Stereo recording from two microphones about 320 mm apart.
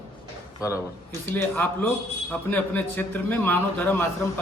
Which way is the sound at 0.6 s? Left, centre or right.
Centre.